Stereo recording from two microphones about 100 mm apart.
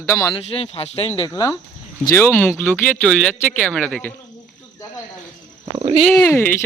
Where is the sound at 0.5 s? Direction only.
75° left (ahead or behind).